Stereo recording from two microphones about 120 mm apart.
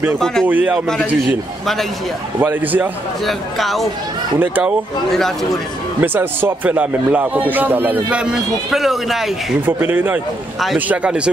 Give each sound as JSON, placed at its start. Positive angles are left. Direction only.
{"t": 0.2, "sound": "speech", "side_deg": 5}
{"t": 0.5, "sound": "speech", "side_deg": -15}
{"t": 2.4, "sound": "speech", "side_deg": -15}
{"t": 3.3, "sound": "speech", "side_deg": 0}
{"t": 4.4, "sound": "speech", "side_deg": -15}
{"t": 5.1, "sound": "speech", "side_deg": 0}
{"t": 5.9, "sound": "speech", "side_deg": -15}
{"t": 9.7, "sound": "speech", "side_deg": -15}